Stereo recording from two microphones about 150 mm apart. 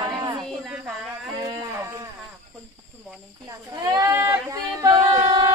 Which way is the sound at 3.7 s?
25° right (ahead or behind).